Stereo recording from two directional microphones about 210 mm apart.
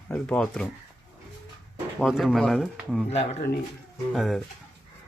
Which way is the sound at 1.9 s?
Centre (ahead or behind).